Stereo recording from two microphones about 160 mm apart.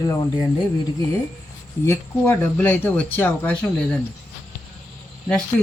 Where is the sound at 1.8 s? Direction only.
15° left (ahead or behind).